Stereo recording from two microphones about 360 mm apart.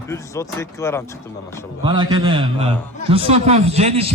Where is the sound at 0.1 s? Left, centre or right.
Centre.